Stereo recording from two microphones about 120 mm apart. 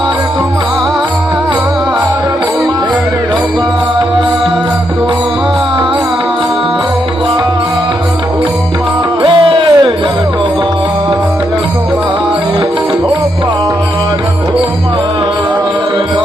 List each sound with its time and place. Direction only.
9.2 s music: 45° right (ahead or behind)